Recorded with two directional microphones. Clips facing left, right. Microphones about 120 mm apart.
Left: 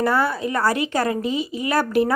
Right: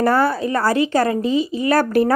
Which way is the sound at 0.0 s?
40° right (ahead or behind).